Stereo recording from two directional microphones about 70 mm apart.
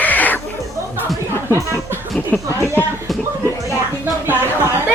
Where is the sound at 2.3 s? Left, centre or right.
Left.